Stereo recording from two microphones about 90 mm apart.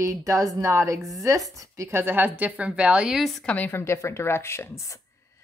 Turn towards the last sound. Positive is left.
turn(degrees=30)  # may be behind; listen again after turning